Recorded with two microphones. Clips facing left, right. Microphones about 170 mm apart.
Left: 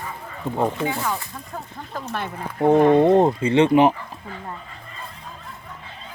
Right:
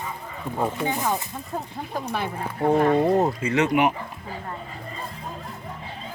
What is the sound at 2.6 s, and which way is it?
Speech, 20° left (ahead or behind).